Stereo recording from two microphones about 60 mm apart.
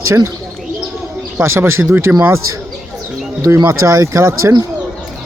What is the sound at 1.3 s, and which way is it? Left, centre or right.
Speech, right.